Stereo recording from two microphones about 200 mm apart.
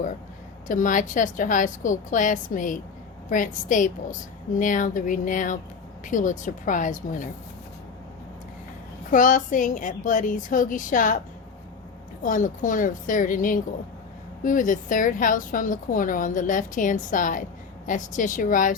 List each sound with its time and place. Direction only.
0.7 s a woman's voice: 40° left (ahead or behind)
9.0 s a woman's voice: 40° left (ahead or behind)
12.2 s a woman's voice: 40° left (ahead or behind)